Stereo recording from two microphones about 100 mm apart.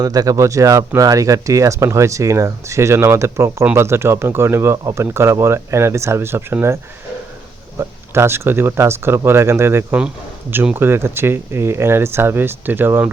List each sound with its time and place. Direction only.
0.0 s speech: 40° right (ahead or behind)
4.8 s speech: 35° right (ahead or behind)
5.0 s speech: 25° right (ahead or behind)
7.8 s speech: 25° right (ahead or behind)